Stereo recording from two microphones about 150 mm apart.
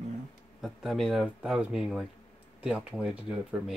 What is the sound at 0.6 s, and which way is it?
Speech, centre (ahead or behind).